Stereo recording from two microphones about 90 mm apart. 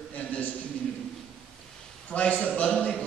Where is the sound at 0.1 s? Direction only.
15° left (ahead or behind).